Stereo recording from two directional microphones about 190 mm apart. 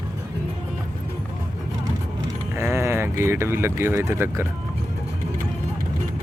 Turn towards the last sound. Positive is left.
turn(degrees=-15)  # may be behind; listen again after turning